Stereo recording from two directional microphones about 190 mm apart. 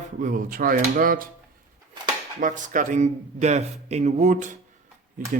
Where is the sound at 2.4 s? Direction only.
45° right (ahead or behind).